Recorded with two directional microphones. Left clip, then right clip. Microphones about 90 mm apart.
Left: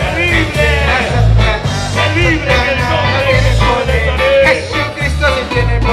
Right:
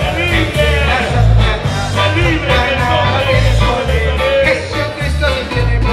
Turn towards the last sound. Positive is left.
turn(degrees=30)  # may be behind; listen again after turning